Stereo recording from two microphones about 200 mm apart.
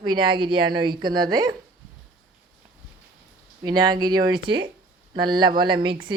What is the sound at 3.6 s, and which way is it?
A woman's voice, 20° right (ahead or behind).